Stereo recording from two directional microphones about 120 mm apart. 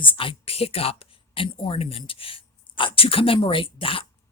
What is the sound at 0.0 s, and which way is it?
Speech, 45° left (ahead or behind).